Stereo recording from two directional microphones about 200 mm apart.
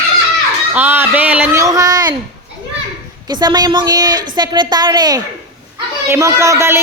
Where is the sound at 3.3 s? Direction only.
20° right (ahead or behind).